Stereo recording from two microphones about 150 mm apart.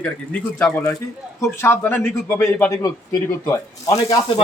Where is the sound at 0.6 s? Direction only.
15° left (ahead or behind).